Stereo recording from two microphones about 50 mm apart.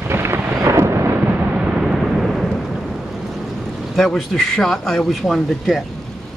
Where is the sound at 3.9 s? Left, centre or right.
Centre.